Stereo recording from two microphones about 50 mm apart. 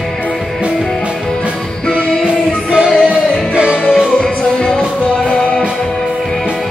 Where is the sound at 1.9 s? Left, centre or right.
Centre.